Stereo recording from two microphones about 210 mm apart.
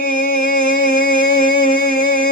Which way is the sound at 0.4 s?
40° right (ahead or behind).